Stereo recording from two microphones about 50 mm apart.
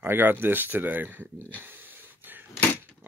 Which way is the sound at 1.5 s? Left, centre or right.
Right.